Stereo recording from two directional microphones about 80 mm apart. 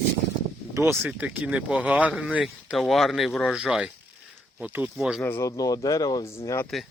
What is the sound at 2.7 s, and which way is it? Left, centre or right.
Speech, centre.